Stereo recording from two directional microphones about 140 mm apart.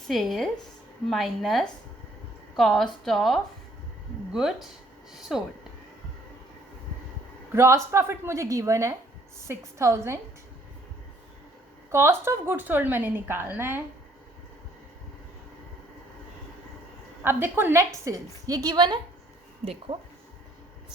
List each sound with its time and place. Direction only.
0.1 s a woman's voice: centre (ahead or behind)
7.5 s a woman's voice: 20° right (ahead or behind)
11.9 s a woman's voice: 20° right (ahead or behind)
17.2 s a woman's voice: 15° right (ahead or behind); by 18.9 s 30° right (ahead or behind)
19.9 s speech: 45° right (ahead or behind)